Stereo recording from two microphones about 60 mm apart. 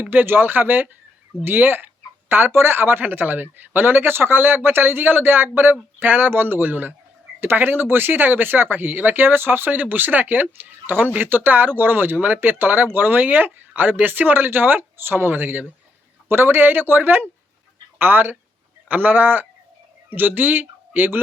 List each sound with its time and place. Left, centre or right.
0.0 s speech: right